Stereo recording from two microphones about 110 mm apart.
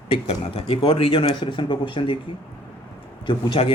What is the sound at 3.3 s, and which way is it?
Speech, 50° left (ahead or behind).